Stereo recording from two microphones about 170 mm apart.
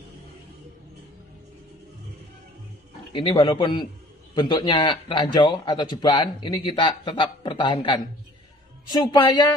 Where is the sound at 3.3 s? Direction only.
25° left (ahead or behind).